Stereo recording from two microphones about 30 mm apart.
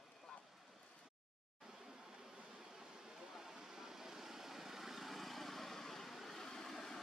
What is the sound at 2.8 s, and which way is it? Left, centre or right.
Vehicle, centre.